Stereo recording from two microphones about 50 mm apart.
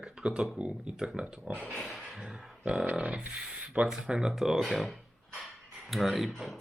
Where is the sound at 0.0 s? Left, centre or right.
Centre.